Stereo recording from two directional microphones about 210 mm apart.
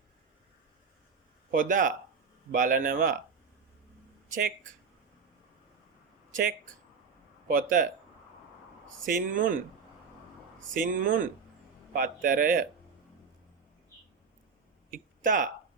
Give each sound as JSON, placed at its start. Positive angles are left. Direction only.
{"t": 1.5, "sound": "speech", "side_deg": -40}
{"t": 4.3, "sound": "speech", "side_deg": -45}
{"t": 7.4, "sound": "speech", "side_deg": -40}
{"t": 9.0, "sound": "speech", "side_deg": -40}
{"t": 10.8, "sound": "speech", "side_deg": -40}
{"t": 14.8, "sound": "a sound", "side_deg": -40}